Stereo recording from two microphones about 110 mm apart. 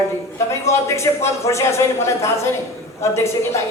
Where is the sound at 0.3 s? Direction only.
25° left (ahead or behind).